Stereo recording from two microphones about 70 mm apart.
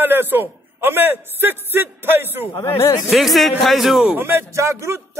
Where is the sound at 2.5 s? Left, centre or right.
Left.